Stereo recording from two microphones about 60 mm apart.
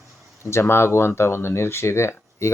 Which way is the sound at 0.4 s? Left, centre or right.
Left.